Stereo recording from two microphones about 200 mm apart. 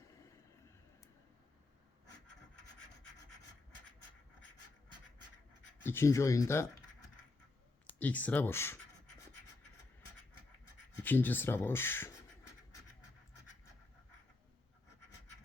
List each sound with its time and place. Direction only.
5.8 s speech: 10° left (ahead or behind)
7.9 s speech: 10° left (ahead or behind)
11.0 s speech: 10° left (ahead or behind)